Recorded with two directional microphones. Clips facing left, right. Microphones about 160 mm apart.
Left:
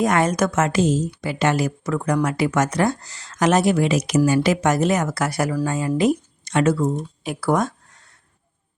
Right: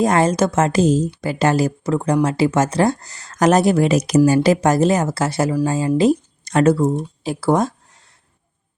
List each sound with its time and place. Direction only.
0.0 s a woman's voice: 30° right (ahead or behind)
6.8 s speech: 30° right (ahead or behind)